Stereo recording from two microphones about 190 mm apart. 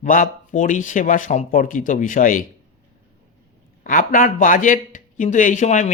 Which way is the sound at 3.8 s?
45° left (ahead or behind).